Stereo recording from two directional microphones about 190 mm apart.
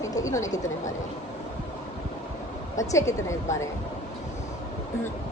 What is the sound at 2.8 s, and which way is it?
Speech, 15° left (ahead or behind).